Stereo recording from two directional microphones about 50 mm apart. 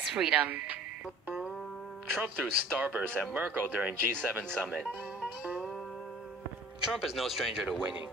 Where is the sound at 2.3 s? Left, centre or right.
Right.